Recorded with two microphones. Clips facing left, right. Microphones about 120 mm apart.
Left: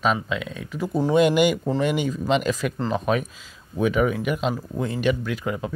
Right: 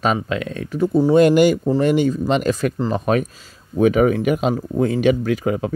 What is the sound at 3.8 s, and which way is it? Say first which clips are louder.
Speech: right 6 dB; 55° right (ahead or behind).